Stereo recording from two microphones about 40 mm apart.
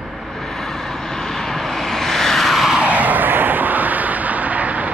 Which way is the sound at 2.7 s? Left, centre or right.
Right.